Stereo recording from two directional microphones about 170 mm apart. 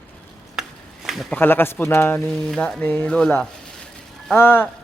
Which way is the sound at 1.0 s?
Centre (ahead or behind).